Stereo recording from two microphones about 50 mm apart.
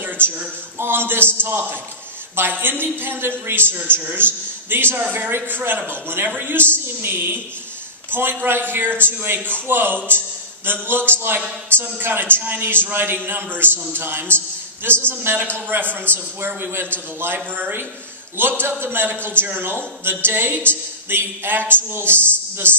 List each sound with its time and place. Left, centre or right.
0.7 s a man's voice: right